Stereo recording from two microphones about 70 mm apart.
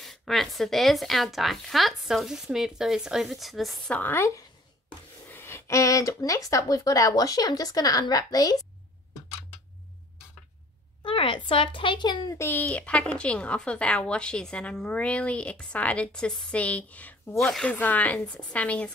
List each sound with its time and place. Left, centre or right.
0.0 s speech: centre
3.9 s a woman's voice: left
5.3 s a sound: left
5.8 s speech: left
12.0 s a child's voice: left
12.5 s a woman's voice: centre
17.4 s a woman's voice: centre
17.6 s a woman's voice: left